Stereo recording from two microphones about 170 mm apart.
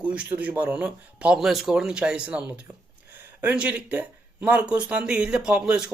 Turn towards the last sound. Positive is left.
turn(degrees=-5)  # may be behind; listen again after turning